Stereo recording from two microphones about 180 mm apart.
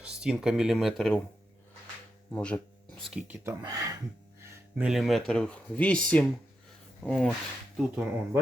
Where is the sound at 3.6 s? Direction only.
20° right (ahead or behind).